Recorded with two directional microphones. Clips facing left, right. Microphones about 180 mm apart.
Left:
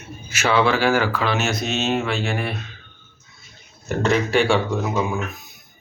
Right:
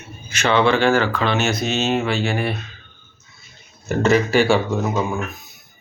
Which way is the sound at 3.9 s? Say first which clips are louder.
Right 3 dB; centre (ahead or behind).